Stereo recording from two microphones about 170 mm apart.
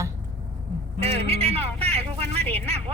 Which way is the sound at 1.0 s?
35° right (ahead or behind).